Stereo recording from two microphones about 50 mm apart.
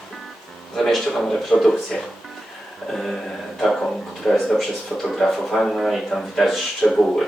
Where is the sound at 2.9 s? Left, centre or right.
Centre.